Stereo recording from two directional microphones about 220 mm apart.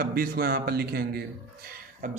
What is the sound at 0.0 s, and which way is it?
Speech, 45° right (ahead or behind).